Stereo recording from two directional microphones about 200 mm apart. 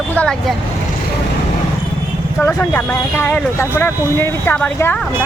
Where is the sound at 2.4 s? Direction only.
10° left (ahead or behind).